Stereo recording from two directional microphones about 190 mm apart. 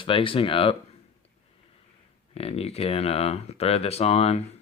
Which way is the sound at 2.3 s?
30° left (ahead or behind).